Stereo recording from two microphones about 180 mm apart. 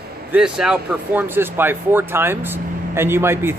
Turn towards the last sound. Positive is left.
turn(degrees=-15)  # may be behind; listen again after turning